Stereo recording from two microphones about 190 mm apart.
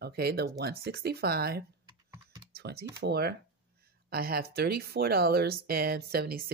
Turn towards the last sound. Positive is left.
turn(degrees=-55)  # may be behind; listen again after turning